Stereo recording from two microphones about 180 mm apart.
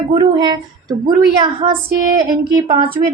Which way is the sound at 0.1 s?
25° right (ahead or behind).